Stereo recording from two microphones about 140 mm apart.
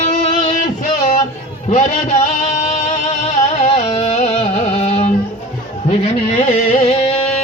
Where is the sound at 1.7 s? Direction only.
60° left (ahead or behind).